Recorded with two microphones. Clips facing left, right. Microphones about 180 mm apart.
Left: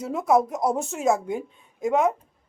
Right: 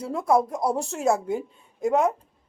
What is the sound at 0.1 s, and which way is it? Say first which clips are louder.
Speech: left 1 dB; 5° left (ahead or behind).